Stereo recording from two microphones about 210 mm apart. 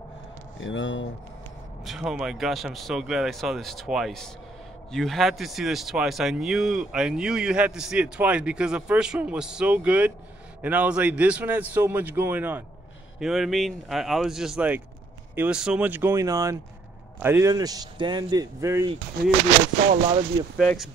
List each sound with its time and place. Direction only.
0.6 s speech: 65° left (ahead or behind)
1.9 s a man's voice: centre (ahead or behind)
19.2 s speech: 50° right (ahead or behind)
19.9 s speech: 30° right (ahead or behind)